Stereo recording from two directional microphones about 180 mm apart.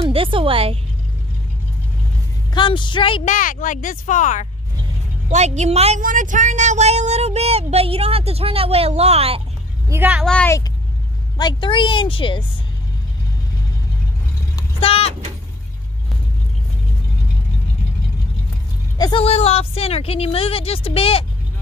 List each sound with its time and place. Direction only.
0.0 s a woman's voice: 30° right (ahead or behind)
2.5 s a woman's voice: 25° left (ahead or behind)
3.3 s speech: 45° left (ahead or behind)
5.3 s speech: 40° right (ahead or behind)
9.8 s a woman's voice: 10° right (ahead or behind)
10.2 s speech: 5° left (ahead or behind)
11.3 s a woman's voice: 25° left (ahead or behind)
14.8 s a woman's voice: 35° left (ahead or behind)
18.9 s a woman's voice: 25° left (ahead or behind)